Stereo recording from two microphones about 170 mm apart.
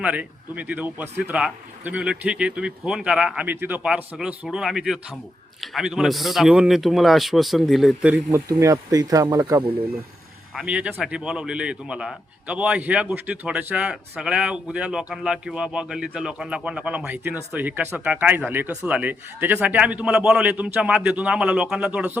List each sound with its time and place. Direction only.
0.0 s a man's voice: 5° right (ahead or behind)
8.4 s speech: 20° right (ahead or behind)
10.5 s a man's voice: 5° right (ahead or behind)